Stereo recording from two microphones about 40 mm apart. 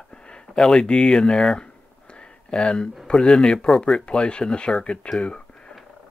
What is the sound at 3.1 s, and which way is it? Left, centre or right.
Speech, centre.